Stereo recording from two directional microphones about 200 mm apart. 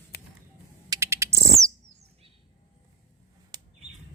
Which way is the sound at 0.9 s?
15° right (ahead or behind).